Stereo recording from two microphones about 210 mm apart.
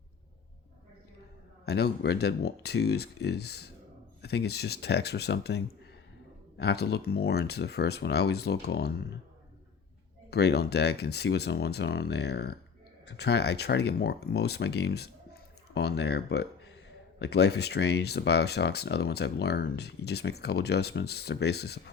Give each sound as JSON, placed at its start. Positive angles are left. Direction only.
{"t": 1.6, "sound": "speech", "side_deg": 50}
{"t": 10.2, "sound": "speech", "side_deg": 50}